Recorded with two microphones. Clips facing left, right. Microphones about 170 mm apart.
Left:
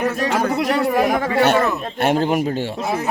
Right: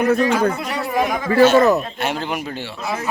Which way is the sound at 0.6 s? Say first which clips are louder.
Left 4 dB; 65° left (ahead or behind).